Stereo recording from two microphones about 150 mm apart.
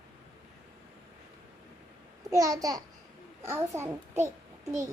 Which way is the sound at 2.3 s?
25° right (ahead or behind).